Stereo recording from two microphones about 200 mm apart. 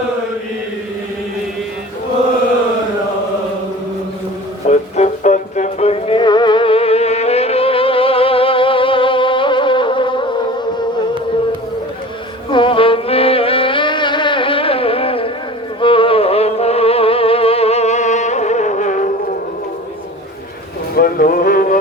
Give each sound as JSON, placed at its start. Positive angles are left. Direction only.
{"t": 4.7, "sound": "music", "side_deg": 35}
{"t": 12.5, "sound": "music", "side_deg": 25}
{"t": 20.9, "sound": "music", "side_deg": 45}